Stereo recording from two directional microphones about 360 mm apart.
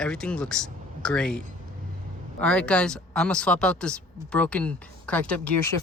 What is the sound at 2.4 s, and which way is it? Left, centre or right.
Speech, centre.